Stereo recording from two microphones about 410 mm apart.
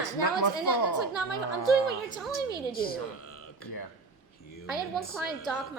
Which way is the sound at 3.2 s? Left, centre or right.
Left.